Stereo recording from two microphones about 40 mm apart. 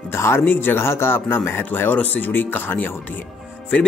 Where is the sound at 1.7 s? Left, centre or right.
Left.